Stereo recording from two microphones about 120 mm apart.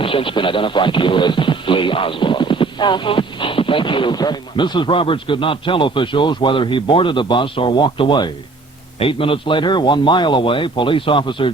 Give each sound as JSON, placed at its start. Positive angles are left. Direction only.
{"t": 0.0, "sound": "speech", "side_deg": 45}